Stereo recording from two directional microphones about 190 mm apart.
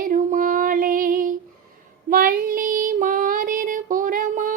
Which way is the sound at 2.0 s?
50° right (ahead or behind).